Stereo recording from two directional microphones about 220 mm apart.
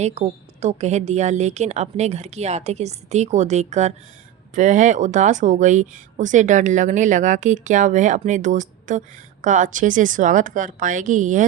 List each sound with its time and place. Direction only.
0.0 s speech: 30° right (ahead or behind)